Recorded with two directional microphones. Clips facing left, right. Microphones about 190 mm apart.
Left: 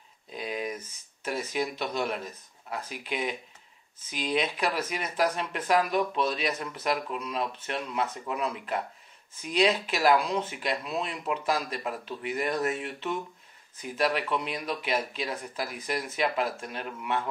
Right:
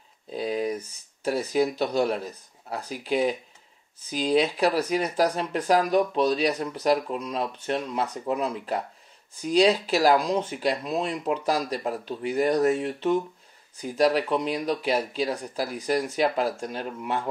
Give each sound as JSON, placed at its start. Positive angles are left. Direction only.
{"t": 0.3, "sound": "speech", "side_deg": -35}